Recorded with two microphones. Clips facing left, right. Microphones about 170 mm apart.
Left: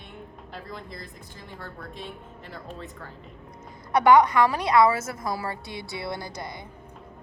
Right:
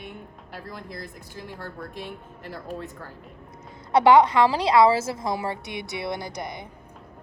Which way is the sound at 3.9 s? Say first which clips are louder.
Right 2 dB; 25° right (ahead or behind).